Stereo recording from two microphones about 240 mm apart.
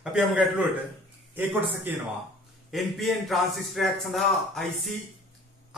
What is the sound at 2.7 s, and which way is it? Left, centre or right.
A man's voice, centre.